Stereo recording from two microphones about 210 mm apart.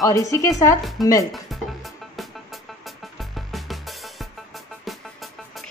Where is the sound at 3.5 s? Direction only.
Centre (ahead or behind).